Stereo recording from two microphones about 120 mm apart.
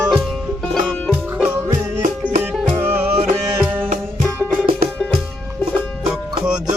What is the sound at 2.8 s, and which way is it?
Music, 15° right (ahead or behind).